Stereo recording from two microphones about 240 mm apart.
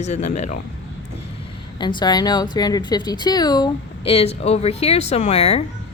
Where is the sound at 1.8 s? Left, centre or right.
Centre.